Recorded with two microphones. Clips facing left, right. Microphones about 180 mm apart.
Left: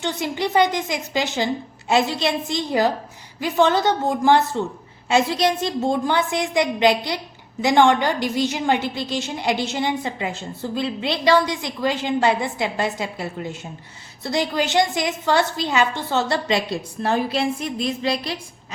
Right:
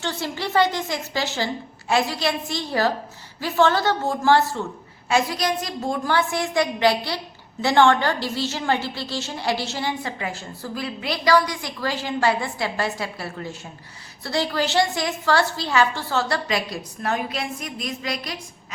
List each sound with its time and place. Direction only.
0.0 s a woman's voice: 15° left (ahead or behind)